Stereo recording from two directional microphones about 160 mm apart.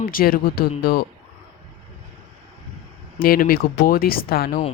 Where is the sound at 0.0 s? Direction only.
65° left (ahead or behind).